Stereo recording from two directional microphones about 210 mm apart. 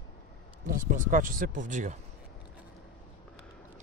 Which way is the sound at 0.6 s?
40° right (ahead or behind).